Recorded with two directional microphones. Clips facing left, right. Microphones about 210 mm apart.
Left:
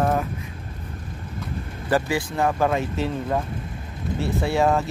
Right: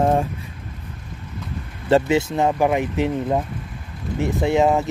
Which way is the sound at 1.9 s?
25° right (ahead or behind).